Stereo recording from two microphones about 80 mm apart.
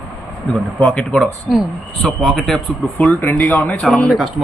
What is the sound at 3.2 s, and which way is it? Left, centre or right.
Speech, left.